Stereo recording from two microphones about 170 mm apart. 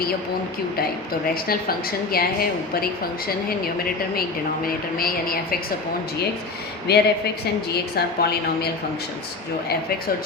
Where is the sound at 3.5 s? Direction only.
60° left (ahead or behind).